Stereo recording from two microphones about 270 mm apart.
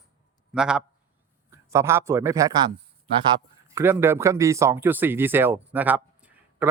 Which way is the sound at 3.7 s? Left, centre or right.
Centre.